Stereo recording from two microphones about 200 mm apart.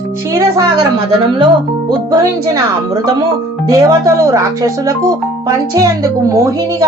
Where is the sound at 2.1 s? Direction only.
20° right (ahead or behind).